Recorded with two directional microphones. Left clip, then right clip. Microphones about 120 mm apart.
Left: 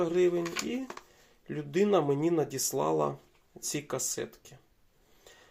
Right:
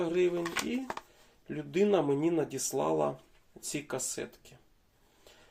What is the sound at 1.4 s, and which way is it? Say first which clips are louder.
Speech: even; 20° left (ahead or behind).